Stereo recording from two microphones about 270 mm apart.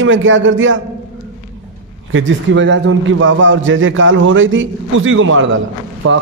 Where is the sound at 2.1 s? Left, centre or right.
Right.